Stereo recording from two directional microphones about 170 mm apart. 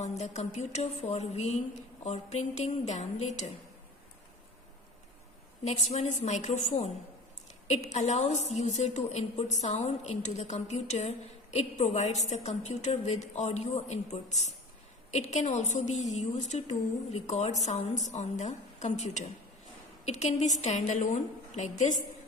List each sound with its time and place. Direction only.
0.0 s a woman's voice: 40° left (ahead or behind)
5.6 s a woman's voice: 40° left (ahead or behind)